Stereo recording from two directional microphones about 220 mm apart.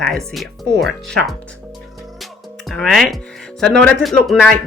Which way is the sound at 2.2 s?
Centre (ahead or behind).